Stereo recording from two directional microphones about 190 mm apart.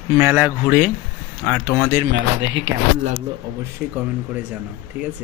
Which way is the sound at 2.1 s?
80° right.